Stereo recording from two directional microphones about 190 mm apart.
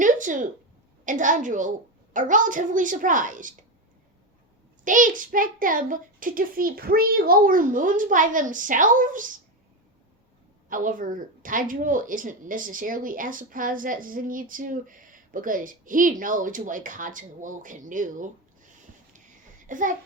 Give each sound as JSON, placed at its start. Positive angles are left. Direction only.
{"t": 0.0, "sound": "a sound", "side_deg": -45}
{"t": 1.0, "sound": "speech", "side_deg": -40}
{"t": 4.9, "sound": "speech", "side_deg": -45}
{"t": 10.7, "sound": "a child's voice", "side_deg": -45}